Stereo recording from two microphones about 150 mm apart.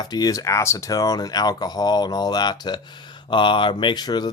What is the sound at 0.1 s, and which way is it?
Speech, 25° left (ahead or behind).